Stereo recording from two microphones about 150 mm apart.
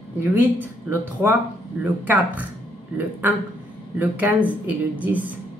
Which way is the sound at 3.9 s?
10° right (ahead or behind).